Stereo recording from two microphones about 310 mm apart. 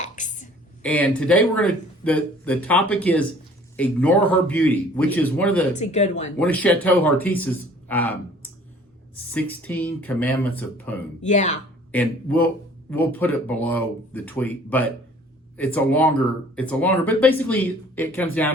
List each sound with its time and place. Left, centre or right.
0.0 s a sound: left
0.8 s speech: centre
5.7 s speech: left
6.4 s speech: centre
11.2 s speech: left
11.9 s speech: centre